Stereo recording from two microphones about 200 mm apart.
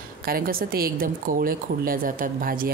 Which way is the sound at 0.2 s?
45° right (ahead or behind).